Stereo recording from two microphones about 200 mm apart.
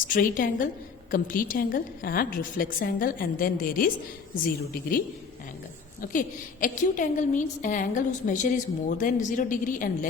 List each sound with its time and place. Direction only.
0.1 s a woman's voice: 45° left (ahead or behind)
6.0 s a woman's voice: 40° left (ahead or behind)